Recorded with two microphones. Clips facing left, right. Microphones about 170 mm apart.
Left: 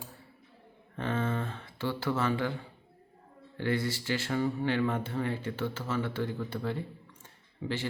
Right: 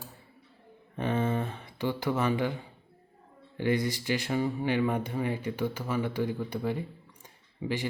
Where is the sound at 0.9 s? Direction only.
15° right (ahead or behind).